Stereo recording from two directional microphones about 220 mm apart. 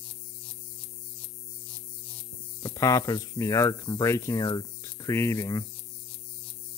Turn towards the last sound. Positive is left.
turn(degrees=15)  # may be behind; listen again after turning